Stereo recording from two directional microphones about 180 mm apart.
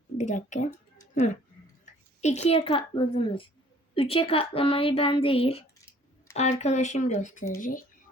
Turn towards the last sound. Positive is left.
turn(degrees=50)  # may be behind; listen again after turning